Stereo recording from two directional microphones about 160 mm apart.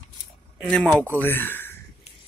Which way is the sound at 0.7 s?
5° left (ahead or behind).